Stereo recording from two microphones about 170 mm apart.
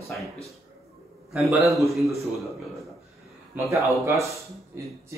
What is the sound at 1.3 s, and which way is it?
Speech, centre (ahead or behind).